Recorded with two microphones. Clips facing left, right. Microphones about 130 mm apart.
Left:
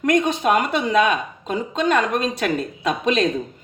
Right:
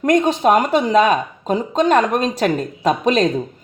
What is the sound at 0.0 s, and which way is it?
Speech, 40° right (ahead or behind).